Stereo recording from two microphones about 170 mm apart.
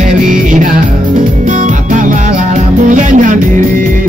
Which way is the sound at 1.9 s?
50° right (ahead or behind).